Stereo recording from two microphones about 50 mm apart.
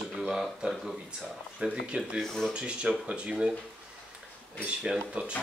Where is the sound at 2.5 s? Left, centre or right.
Right.